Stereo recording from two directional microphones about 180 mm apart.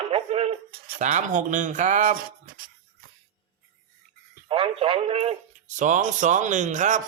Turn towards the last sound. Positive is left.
turn(degrees=-40)  # may be behind; listen again after turning